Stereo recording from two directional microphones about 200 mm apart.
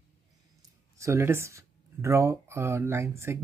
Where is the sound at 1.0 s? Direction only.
15° right (ahead or behind).